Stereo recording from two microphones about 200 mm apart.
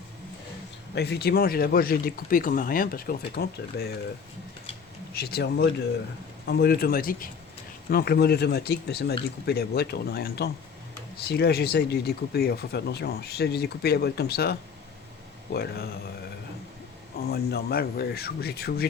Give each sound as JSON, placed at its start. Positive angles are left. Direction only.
{"t": 0.9, "sound": "speech", "side_deg": 55}
{"t": 5.1, "sound": "speech", "side_deg": 50}
{"t": 17.2, "sound": "speech", "side_deg": 50}